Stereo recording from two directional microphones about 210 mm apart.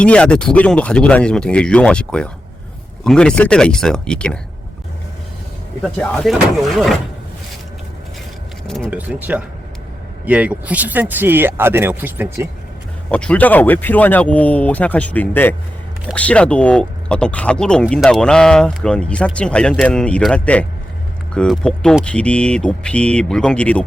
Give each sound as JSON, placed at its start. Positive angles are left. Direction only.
{"t": 0.0, "sound": "speech", "side_deg": 5}
{"t": 5.8, "sound": "speech", "side_deg": 0}
{"t": 8.6, "sound": "speech", "side_deg": 0}
{"t": 13.1, "sound": "speech", "side_deg": 5}